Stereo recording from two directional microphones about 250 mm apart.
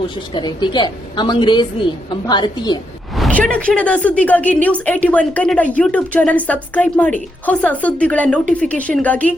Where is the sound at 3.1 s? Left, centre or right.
Centre.